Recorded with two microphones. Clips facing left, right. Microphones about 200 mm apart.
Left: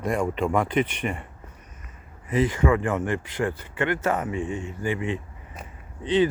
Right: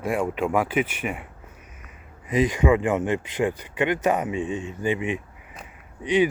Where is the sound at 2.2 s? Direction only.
15° right (ahead or behind).